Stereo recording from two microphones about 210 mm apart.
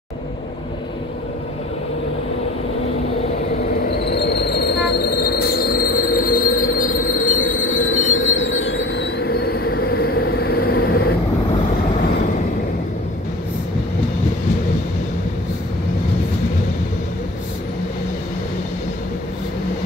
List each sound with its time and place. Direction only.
4.0 s train: 50° left (ahead or behind)
6.4 s train: 70° left (ahead or behind)
6.8 s train: 40° left (ahead or behind)
7.3 s train: 65° left (ahead or behind); by 11.0 s 45° left (ahead or behind)